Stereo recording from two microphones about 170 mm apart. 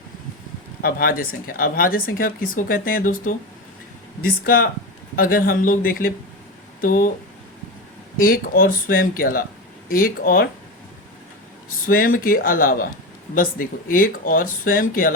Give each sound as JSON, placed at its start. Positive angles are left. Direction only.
{"t": 0.8, "sound": "speech", "side_deg": 60}
{"t": 8.2, "sound": "speech", "side_deg": 55}
{"t": 11.9, "sound": "speech", "side_deg": 55}